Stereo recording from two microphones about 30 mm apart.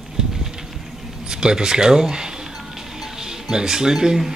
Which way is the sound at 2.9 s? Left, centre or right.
Centre.